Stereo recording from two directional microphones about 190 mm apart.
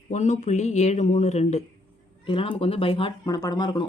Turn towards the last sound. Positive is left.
turn(degrees=20)  # may be behind; listen again after turning